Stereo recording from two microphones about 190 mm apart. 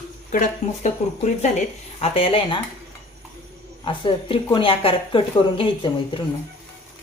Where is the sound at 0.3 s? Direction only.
40° left (ahead or behind).